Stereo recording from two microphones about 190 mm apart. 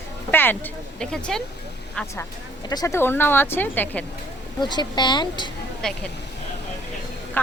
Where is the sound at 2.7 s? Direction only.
15° left (ahead or behind).